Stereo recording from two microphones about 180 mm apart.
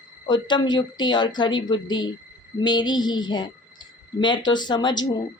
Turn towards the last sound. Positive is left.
turn(degrees=25)  # may be behind; listen again after turning